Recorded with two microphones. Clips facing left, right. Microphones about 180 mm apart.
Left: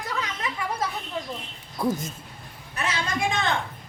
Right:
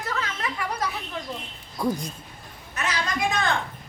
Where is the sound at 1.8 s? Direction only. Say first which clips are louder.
Even; 5° left (ahead or behind).